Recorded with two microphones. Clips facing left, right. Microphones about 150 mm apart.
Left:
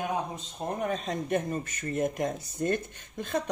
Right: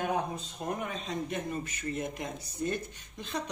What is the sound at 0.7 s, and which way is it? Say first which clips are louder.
Speech: left 4 dB; 40° left (ahead or behind).